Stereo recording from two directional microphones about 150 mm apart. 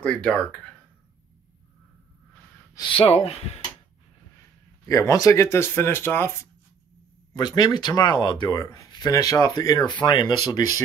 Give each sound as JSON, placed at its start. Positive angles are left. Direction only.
{"t": 0.0, "sound": "speech", "side_deg": 5}
{"t": 2.7, "sound": "speech", "side_deg": 35}
{"t": 4.8, "sound": "speech", "side_deg": 20}
{"t": 7.3, "sound": "speech", "side_deg": 25}